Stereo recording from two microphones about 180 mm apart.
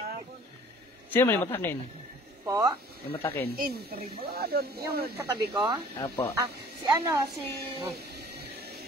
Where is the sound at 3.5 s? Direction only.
55° right (ahead or behind).